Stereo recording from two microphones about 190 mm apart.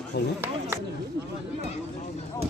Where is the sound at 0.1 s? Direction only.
65° left (ahead or behind).